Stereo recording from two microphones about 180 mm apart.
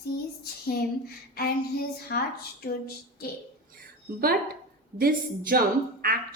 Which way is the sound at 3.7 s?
55° right (ahead or behind).